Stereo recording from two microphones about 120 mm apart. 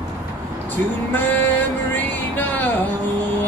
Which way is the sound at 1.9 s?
15° left (ahead or behind).